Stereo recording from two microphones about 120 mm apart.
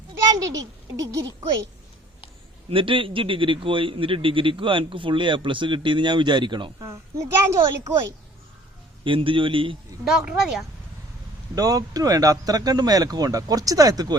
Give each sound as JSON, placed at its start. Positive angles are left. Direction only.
{"t": 0.3, "sound": "a child's voice", "side_deg": -30}
{"t": 2.6, "sound": "a man's voice", "side_deg": -45}
{"t": 6.8, "sound": "speech", "side_deg": -25}
{"t": 9.0, "sound": "a man's voice", "side_deg": -45}
{"t": 10.0, "sound": "speech", "side_deg": -5}
{"t": 11.5, "sound": "speech", "side_deg": -30}